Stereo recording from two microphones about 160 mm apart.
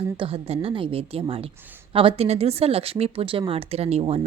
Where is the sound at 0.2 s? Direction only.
35° right (ahead or behind).